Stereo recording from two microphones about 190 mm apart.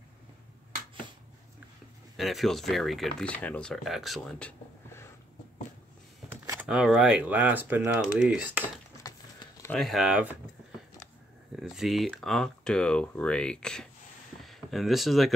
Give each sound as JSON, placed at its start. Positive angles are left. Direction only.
{"t": 2.1, "sound": "speech", "side_deg": 0}
{"t": 6.2, "sound": "a sound", "side_deg": -15}
{"t": 6.7, "sound": "speech", "side_deg": -5}
{"t": 9.0, "sound": "a sound", "side_deg": 20}
{"t": 9.7, "sound": "speech", "side_deg": 0}
{"t": 11.5, "sound": "speech", "side_deg": 0}